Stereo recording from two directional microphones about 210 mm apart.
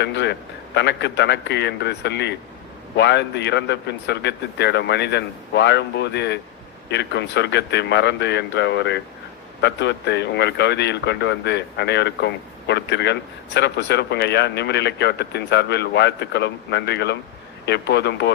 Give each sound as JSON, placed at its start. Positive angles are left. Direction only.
{"t": 0.0, "sound": "a man's voice", "side_deg": 55}